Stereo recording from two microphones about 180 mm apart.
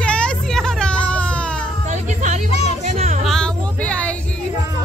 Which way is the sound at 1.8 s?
40° right (ahead or behind).